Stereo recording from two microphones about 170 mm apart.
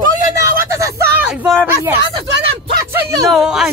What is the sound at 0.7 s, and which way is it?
Speech, 15° right (ahead or behind).